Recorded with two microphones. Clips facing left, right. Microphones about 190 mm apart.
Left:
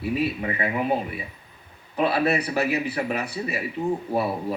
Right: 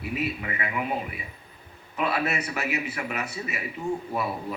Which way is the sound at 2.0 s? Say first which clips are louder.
Left 5 dB; 30° left (ahead or behind).